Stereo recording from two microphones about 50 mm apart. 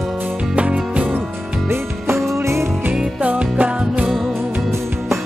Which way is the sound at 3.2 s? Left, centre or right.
Right.